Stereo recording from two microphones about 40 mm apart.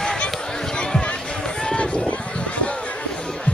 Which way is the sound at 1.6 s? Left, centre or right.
Left.